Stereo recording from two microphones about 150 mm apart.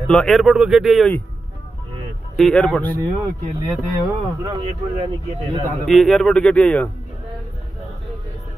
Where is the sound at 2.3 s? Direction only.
5° left (ahead or behind).